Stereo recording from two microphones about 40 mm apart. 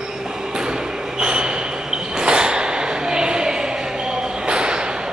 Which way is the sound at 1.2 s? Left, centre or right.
Right.